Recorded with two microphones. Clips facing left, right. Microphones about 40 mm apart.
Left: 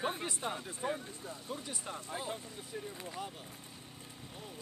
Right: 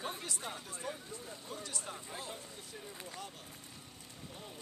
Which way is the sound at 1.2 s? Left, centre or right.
Centre.